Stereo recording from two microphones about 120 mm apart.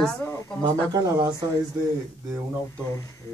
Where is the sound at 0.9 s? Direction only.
35° right (ahead or behind).